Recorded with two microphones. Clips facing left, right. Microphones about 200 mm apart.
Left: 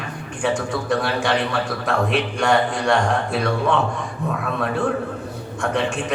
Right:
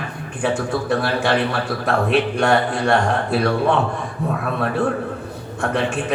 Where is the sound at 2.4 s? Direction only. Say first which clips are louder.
Right 1 dB; 60° right (ahead or behind).